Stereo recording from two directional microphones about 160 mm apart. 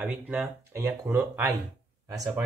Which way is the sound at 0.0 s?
10° right (ahead or behind).